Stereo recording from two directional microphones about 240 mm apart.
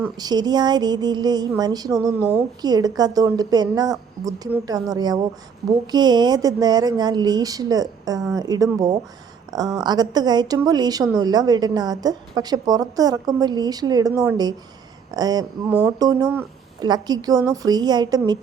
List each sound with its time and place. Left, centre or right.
0.2 s a woman's voice: centre